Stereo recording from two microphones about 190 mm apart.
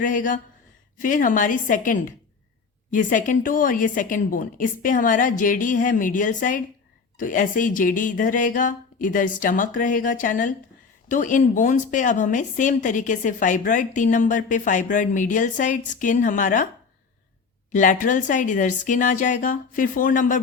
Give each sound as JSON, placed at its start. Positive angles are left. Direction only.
{"t": 0.0, "sound": "a woman's voice", "side_deg": 45}
{"t": 17.7, "sound": "a woman's voice", "side_deg": 40}